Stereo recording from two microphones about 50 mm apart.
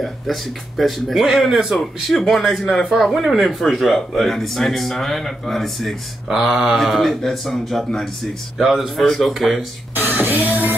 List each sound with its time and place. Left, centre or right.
0.0 s speech: centre
6.2 s speech: centre
9.9 s music: right